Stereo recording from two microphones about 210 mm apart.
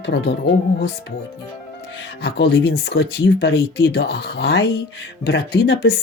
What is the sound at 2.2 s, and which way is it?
Speech, 50° left (ahead or behind).